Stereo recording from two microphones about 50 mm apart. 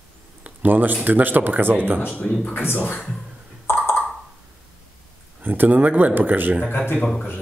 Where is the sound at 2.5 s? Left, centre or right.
Left.